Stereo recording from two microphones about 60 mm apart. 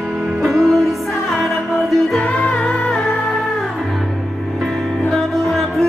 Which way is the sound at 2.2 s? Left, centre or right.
Left.